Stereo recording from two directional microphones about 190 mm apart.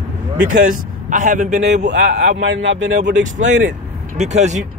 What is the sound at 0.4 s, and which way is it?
Speech, 45° right (ahead or behind).